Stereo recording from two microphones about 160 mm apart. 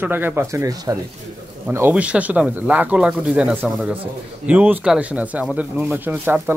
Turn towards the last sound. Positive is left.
turn(degrees=-10)  # may be behind; listen again after turning